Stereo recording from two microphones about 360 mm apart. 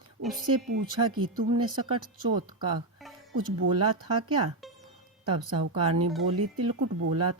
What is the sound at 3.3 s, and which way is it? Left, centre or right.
Speech, right.